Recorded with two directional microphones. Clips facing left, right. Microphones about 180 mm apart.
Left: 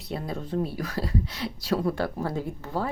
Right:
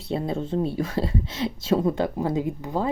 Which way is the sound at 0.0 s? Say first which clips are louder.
Right 6 dB; 25° right (ahead or behind).